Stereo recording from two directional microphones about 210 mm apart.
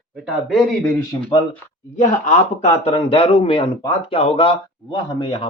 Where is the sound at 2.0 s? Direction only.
35° left (ahead or behind).